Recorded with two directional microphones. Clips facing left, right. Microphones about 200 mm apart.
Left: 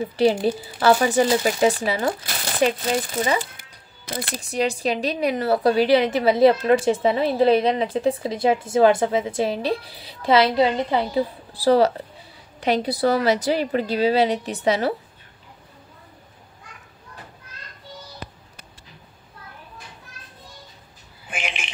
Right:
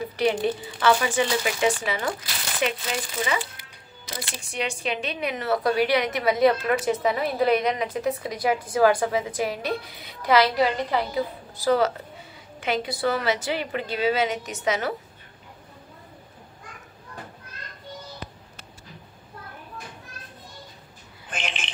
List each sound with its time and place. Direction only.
0.1 s a woman's voice: 30° left (ahead or behind)
4.0 s speech: 55° left (ahead or behind)
4.4 s a woman's voice: 35° left (ahead or behind)
21.3 s a sound: 10° left (ahead or behind)